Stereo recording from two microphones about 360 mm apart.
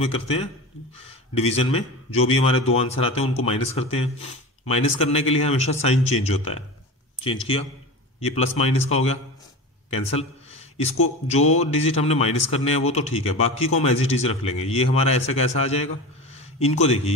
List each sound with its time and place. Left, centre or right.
0.0 s speech: centre
8.2 s speech: centre
9.8 s a sound: centre
11.2 s speech: centre